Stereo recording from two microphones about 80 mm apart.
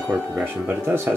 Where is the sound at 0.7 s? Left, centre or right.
Right.